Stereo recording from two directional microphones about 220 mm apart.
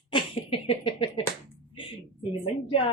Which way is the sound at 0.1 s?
25° left (ahead or behind).